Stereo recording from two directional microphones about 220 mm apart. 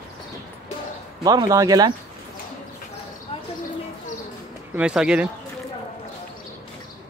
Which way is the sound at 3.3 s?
30° left (ahead or behind).